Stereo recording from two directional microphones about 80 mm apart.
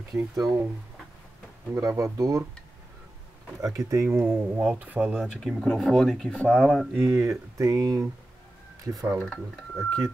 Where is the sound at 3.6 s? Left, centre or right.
Right; by 5.3 s centre.